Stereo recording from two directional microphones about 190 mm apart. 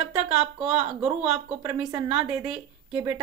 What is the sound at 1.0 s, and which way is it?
Speech, 5° right (ahead or behind).